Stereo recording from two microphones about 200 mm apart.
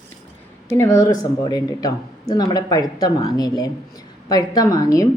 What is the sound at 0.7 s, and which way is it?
A woman's voice, 15° left (ahead or behind).